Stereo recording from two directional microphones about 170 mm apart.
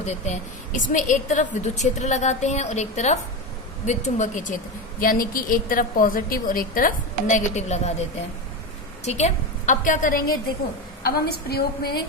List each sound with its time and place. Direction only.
0.0 s a woman's voice: 45° left (ahead or behind)
9.0 s a woman's voice: 40° left (ahead or behind)
11.0 s a woman's voice: 65° left (ahead or behind)